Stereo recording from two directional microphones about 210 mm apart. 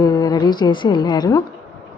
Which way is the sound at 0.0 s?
20° left (ahead or behind).